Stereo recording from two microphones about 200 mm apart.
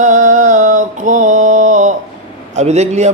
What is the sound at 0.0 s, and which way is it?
Mantra, 40° right (ahead or behind).